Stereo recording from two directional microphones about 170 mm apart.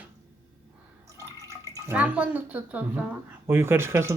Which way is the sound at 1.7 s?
10° right (ahead or behind).